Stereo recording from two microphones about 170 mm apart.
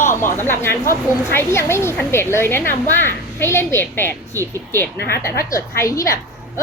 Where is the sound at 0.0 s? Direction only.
15° left (ahead or behind).